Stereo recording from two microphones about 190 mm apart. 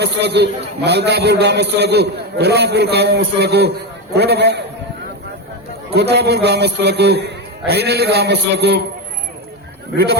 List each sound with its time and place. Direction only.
0.0 s a man's voice: 60° right (ahead or behind)
5.9 s a man's voice: 60° right (ahead or behind)